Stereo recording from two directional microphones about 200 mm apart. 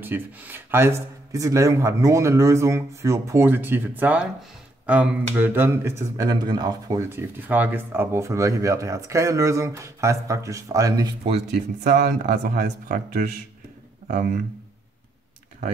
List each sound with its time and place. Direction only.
0.0 s speech: 10° right (ahead or behind)
11.8 s a man's voice: 40° right (ahead or behind)